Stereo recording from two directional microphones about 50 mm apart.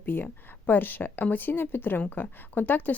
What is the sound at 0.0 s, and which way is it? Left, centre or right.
Speech, left.